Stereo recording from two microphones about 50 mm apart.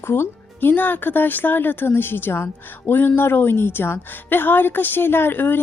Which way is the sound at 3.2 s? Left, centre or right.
Left.